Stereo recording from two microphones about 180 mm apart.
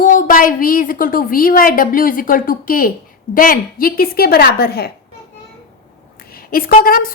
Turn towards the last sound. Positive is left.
turn(degrees=55)  # may be behind; listen again after turning